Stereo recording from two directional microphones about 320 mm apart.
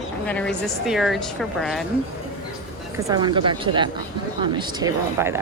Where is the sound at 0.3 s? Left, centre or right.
Centre.